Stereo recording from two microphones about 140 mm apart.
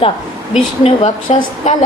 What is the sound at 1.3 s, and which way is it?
Speech, 50° left (ahead or behind).